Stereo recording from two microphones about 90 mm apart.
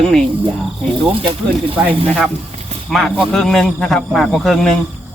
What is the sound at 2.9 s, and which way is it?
Speech, centre (ahead or behind).